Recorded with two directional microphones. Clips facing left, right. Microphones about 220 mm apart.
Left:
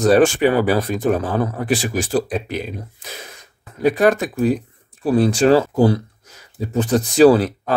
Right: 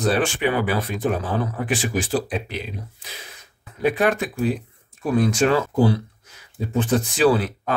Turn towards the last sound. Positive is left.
turn(degrees=40)  # may be behind; listen again after turning